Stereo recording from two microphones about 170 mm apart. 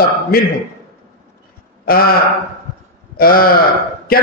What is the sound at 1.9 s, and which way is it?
Speech, 60° left (ahead or behind).